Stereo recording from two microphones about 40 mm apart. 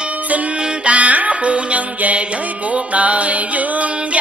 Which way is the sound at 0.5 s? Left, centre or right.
Right.